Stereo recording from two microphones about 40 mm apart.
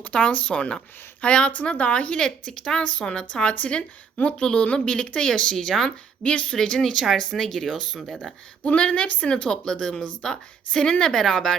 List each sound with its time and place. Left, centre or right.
0.1 s a woman's voice: left
2.1 s a woman's voice: centre
6.2 s a woman's voice: left; by 8.2 s centre
8.6 s a woman's voice: left; by 11.5 s centre